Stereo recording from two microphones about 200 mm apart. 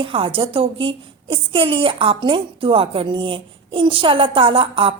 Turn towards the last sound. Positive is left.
turn(degrees=-25)  # may be behind; listen again after turning